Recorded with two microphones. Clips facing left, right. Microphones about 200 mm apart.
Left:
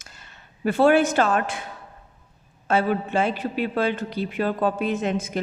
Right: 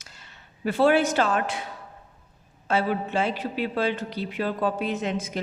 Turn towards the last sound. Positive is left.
turn(degrees=50)  # may be behind; listen again after turning